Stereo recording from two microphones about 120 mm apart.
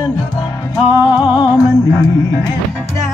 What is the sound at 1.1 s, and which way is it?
Music, 40° left (ahead or behind).